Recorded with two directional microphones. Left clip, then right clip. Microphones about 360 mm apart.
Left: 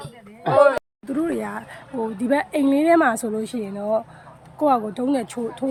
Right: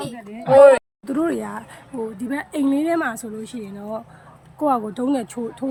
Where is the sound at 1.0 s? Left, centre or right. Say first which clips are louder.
Right 2 dB; centre.